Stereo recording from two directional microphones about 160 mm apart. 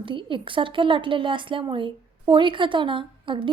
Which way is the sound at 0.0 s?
30° right (ahead or behind).